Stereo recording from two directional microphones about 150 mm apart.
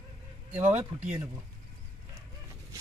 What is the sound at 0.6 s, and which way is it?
Speech, 50° right (ahead or behind).